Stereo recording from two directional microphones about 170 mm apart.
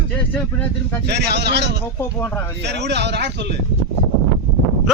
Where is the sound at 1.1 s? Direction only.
75° right (ahead or behind).